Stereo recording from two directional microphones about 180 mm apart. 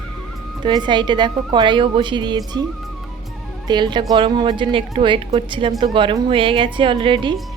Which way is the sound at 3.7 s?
25° right (ahead or behind).